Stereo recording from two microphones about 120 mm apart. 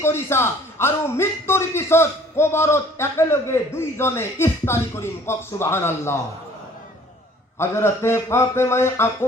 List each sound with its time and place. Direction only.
0.0 s speech: 20° left (ahead or behind)
7.6 s speech: 20° left (ahead or behind)